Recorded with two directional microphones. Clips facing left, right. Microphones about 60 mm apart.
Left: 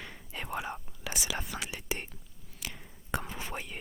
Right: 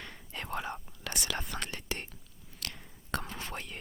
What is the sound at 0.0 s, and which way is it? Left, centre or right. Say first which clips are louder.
Whispering: left 1 dB; centre.